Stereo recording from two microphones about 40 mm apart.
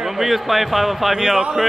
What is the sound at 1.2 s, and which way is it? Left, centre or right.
Speech, centre.